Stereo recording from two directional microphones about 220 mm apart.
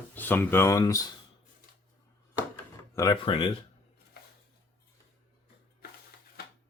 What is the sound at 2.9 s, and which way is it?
Speech, 15° left (ahead or behind).